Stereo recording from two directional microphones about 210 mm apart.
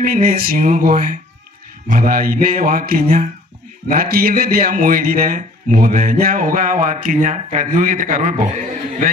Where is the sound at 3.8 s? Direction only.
45° right (ahead or behind).